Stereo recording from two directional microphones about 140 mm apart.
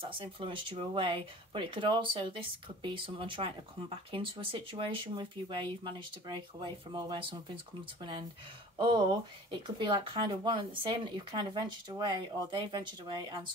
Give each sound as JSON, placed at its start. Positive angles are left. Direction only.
{"t": 0.0, "sound": "speech", "side_deg": -35}
{"t": 9.5, "sound": "speech", "side_deg": -35}